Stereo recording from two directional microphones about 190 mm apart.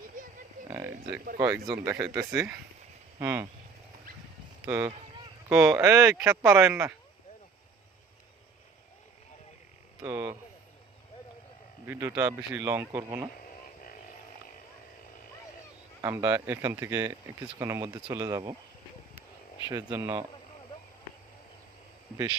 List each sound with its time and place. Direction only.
0.2 s a sound: 45° right (ahead or behind)
0.7 s a sound: 15° right (ahead or behind)
1.4 s speech: 20° right (ahead or behind)
4.6 s speech: 15° right (ahead or behind)
10.0 s speech: 15° right (ahead or behind)
11.9 s speech: 15° right (ahead or behind)
16.0 s speech: 15° right (ahead or behind)
19.9 s speech: 15° right (ahead or behind)